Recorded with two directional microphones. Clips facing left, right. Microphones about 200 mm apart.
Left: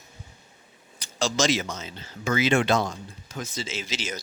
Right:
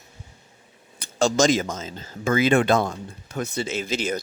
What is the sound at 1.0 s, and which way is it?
Speech, 50° right (ahead or behind).